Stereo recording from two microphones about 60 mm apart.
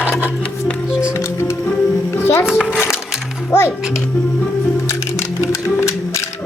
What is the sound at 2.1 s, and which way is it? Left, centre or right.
Music, left.